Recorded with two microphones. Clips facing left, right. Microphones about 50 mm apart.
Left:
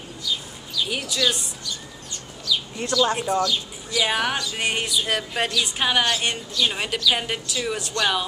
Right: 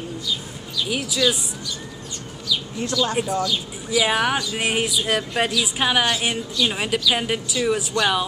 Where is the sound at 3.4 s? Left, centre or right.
Centre.